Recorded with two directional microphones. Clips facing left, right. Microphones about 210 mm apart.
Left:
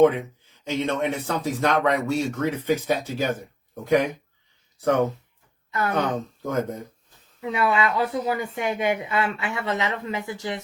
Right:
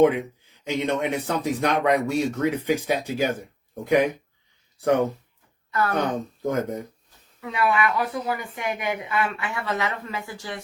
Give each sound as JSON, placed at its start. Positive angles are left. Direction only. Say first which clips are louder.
{"t": 0.0, "sound": "speech", "louder": "left 1 dB", "side_deg": -15}
{"t": 5.7, "sound": "speech", "louder": "right 1 dB", "side_deg": 20}
{"t": 6.0, "sound": "speech", "louder": "even", "side_deg": -15}
{"t": 7.4, "sound": "speech", "louder": "even", "side_deg": 25}